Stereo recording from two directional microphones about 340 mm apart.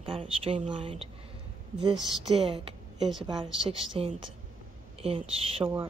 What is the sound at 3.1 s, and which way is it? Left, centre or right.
Speech, centre.